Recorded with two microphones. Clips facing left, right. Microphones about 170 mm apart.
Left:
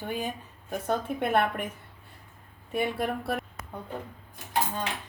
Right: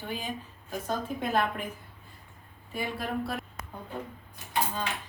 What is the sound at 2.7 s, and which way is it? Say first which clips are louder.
Speech: left 6 dB; 65° left (ahead or behind).